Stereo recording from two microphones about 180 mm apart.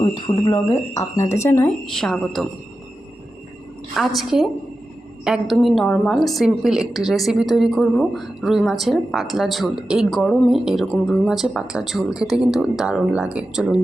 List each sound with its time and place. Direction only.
0.0 s a woman's voice: 25° left (ahead or behind); by 2.5 s centre (ahead or behind)
3.9 s a woman's voice: centre (ahead or behind)